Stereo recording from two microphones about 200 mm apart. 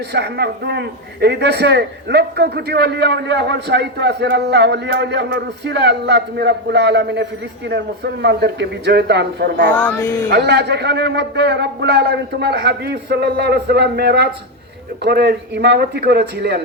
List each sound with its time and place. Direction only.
0.1 s a man's voice: 55° right (ahead or behind)
9.7 s speech: 10° left (ahead or behind)
10.2 s a man's voice: 55° right (ahead or behind)